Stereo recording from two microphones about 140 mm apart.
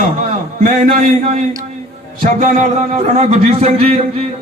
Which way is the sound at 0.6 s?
60° right (ahead or behind).